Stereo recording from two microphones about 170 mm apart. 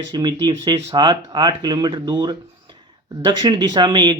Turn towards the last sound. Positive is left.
turn(degrees=-25)  # may be behind; listen again after turning